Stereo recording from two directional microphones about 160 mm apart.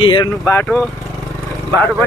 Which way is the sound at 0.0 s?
30° left (ahead or behind).